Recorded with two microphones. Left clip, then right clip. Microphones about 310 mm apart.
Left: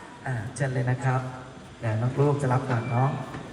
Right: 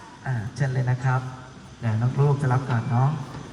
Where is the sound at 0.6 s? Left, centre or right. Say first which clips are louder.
Left 1 dB; centre.